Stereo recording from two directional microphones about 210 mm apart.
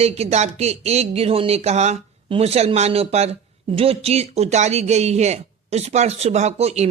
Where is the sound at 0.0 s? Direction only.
30° right (ahead or behind).